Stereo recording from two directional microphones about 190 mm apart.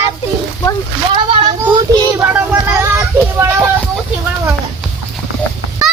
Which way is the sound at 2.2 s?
10° right (ahead or behind).